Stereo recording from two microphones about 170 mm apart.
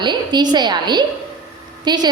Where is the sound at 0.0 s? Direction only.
25° right (ahead or behind).